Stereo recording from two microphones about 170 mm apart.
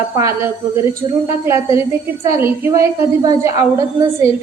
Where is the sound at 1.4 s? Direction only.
15° right (ahead or behind).